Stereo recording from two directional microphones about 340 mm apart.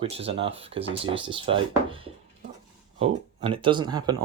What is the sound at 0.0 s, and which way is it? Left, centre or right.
Speech, centre.